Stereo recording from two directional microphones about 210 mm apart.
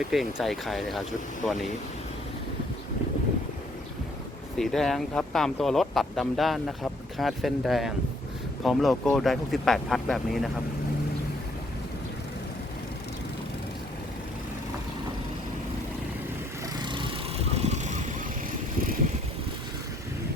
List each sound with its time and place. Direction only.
0.1 s speech: centre (ahead or behind)
4.5 s speech: centre (ahead or behind)
16.7 s vehicle: 20° right (ahead or behind)